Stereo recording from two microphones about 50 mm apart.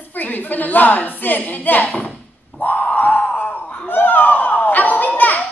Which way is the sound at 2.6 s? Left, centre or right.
Left.